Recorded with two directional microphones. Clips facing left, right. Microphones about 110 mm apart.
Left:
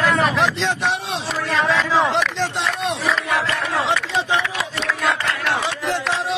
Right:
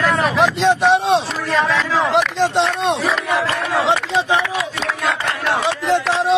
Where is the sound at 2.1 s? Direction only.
15° right (ahead or behind).